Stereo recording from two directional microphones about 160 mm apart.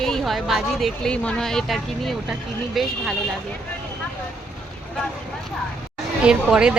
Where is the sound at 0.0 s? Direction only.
Centre (ahead or behind).